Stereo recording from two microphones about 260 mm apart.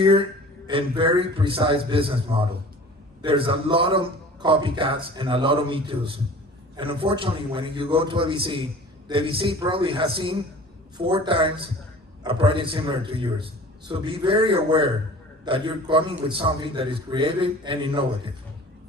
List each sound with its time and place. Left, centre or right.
0.7 s a man's voice: centre